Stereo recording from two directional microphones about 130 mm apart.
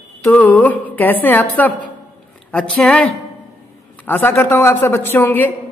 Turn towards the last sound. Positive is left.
turn(degrees=15)  # may be behind; listen again after turning